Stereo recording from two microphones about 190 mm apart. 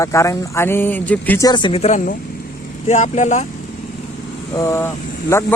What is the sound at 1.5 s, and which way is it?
Speech, 25° left (ahead or behind).